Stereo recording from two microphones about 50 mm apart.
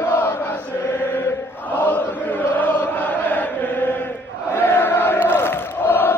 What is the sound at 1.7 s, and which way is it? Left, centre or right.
Chant, left.